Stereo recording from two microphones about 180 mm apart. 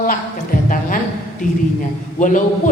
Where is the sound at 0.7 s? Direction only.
50° left (ahead or behind).